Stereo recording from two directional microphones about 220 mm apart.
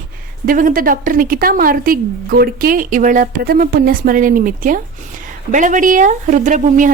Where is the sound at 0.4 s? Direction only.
40° right (ahead or behind).